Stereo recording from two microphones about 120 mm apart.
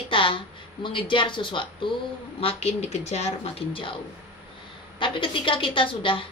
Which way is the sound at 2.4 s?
60° left (ahead or behind).